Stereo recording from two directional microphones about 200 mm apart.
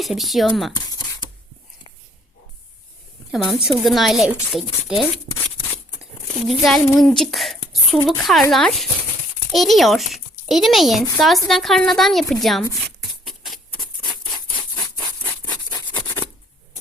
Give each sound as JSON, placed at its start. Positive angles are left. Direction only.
{"t": 0.0, "sound": "a woman's voice", "side_deg": 0}
{"t": 0.9, "sound": "a sound", "side_deg": 20}
{"t": 3.3, "sound": "a woman's voice", "side_deg": 0}
{"t": 6.5, "sound": "a woman's voice", "side_deg": 0}
{"t": 13.0, "sound": "a sound", "side_deg": 0}
{"t": 14.0, "sound": "patter", "side_deg": 20}
{"t": 14.8, "sound": "rub", "side_deg": 15}